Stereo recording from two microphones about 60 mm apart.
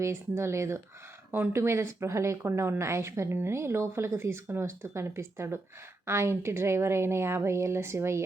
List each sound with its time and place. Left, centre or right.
0.0 s speech: right